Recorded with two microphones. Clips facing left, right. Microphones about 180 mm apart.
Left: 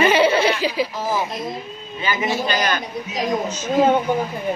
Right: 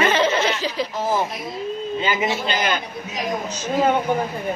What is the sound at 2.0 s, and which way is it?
Speech, 25° right (ahead or behind).